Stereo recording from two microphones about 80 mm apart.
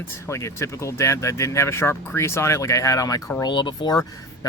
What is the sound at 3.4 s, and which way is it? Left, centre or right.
Speech, left.